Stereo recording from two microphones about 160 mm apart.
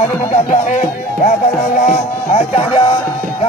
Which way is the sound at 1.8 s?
40° left (ahead or behind).